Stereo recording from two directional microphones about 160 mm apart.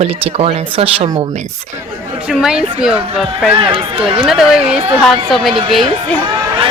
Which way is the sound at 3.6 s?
35° right (ahead or behind).